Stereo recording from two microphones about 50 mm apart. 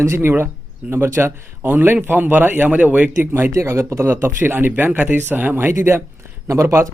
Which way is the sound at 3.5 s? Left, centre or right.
Right.